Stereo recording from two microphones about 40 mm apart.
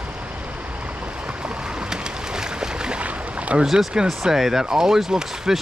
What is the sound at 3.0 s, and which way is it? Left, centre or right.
Boat, right.